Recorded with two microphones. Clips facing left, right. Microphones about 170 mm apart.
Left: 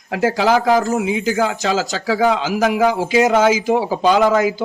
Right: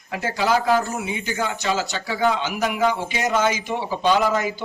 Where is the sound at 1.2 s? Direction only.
90° left.